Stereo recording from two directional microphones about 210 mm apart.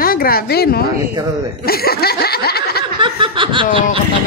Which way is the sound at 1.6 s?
45° left (ahead or behind).